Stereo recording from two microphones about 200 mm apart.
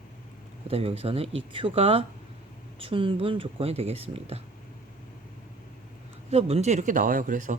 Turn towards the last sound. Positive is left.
turn(degrees=-40)  # may be behind; listen again after turning